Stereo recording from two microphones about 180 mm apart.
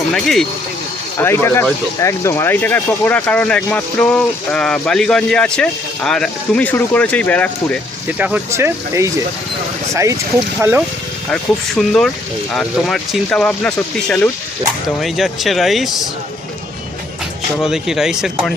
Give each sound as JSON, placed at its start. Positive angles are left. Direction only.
{"t": 0.1, "sound": "speech", "side_deg": 0}
{"t": 1.2, "sound": "speech", "side_deg": 15}
{"t": 8.2, "sound": "speech", "side_deg": -10}
{"t": 11.3, "sound": "speech", "side_deg": 5}
{"t": 17.6, "sound": "speech", "side_deg": 0}